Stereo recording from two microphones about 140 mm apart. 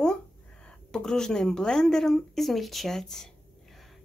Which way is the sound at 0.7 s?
5° left (ahead or behind).